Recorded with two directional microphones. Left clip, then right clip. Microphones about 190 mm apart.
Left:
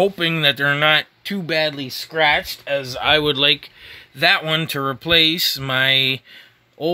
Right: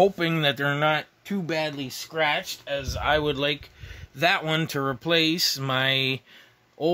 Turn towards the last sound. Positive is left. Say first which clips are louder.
# left 2 dB
turn(degrees=0)  # may be behind; listen again after turning